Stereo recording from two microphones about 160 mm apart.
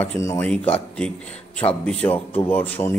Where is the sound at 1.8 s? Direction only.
10° left (ahead or behind).